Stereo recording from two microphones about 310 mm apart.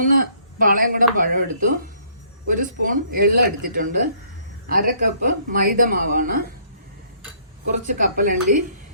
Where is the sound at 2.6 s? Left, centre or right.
Right.